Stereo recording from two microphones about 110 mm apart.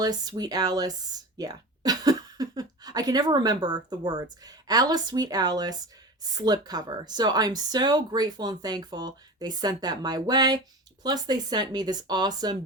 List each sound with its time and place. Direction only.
0.0 s speech: 35° right (ahead or behind)